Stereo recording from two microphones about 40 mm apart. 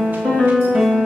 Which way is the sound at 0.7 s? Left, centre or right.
Centre.